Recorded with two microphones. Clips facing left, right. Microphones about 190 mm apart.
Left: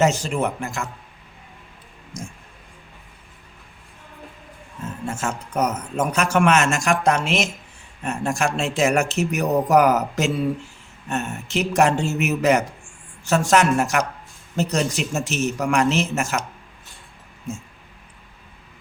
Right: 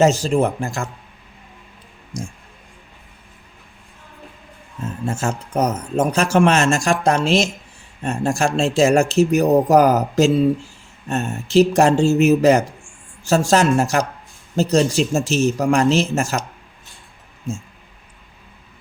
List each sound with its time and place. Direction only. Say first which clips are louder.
0.0 s speech: right 5 dB; 35° right (ahead or behind)
2.1 s speech: right 5 dB; 30° right (ahead or behind)
5.0 s speech: right 4 dB; 30° right (ahead or behind)